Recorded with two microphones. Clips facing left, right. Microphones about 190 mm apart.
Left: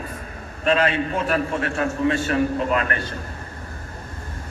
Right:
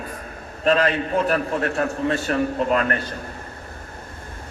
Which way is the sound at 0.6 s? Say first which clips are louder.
Right 1 dB; 40° right (ahead or behind).